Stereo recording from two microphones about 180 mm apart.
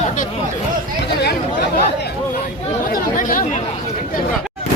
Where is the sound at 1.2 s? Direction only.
65° left (ahead or behind).